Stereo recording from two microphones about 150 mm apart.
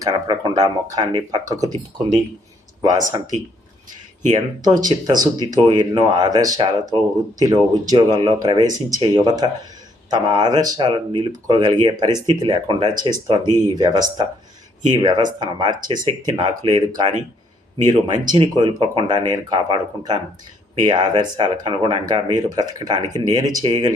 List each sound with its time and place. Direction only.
0.0 s speech: 25° right (ahead or behind)
4.3 s speech: 25° right (ahead or behind)